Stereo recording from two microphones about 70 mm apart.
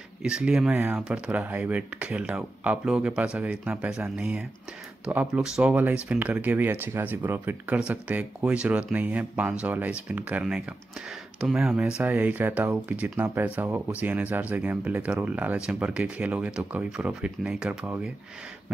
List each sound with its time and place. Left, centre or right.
0.2 s speech: centre
0.7 s speech: right
1.0 s speech: centre
2.8 s speech: centre
12.0 s speech: right